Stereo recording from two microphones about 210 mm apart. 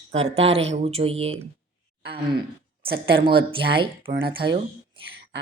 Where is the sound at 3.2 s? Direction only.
25° right (ahead or behind).